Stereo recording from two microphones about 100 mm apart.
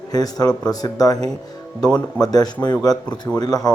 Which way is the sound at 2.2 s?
40° left (ahead or behind).